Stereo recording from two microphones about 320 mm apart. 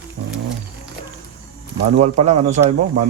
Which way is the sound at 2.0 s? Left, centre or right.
Right.